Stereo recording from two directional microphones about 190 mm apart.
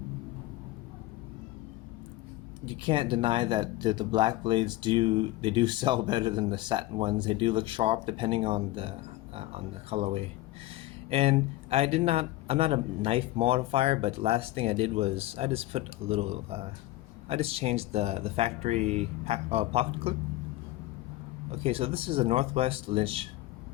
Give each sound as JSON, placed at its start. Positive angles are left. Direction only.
{"t": 2.6, "sound": "a man's voice", "side_deg": -25}
{"t": 21.5, "sound": "speech", "side_deg": -30}